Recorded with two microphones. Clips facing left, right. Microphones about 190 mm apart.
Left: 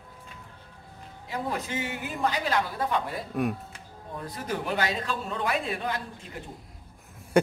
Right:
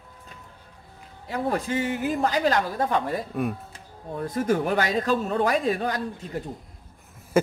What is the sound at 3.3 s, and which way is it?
Speech, centre (ahead or behind).